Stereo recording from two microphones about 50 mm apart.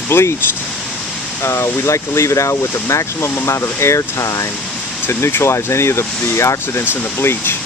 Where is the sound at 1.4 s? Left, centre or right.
Left.